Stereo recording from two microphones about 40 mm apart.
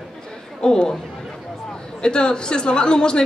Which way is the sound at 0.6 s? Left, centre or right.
Centre.